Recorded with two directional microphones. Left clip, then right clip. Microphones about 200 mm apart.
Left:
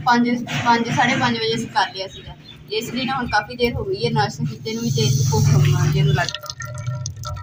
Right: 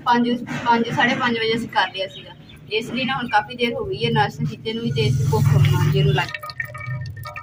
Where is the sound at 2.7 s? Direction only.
10° right (ahead or behind).